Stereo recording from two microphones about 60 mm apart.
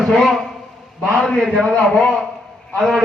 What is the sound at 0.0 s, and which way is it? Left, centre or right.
Speech, centre.